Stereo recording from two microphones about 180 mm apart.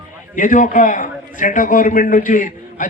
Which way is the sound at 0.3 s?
45° left (ahead or behind).